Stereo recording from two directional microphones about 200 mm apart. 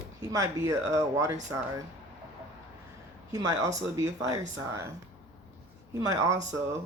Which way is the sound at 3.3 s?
15° right (ahead or behind).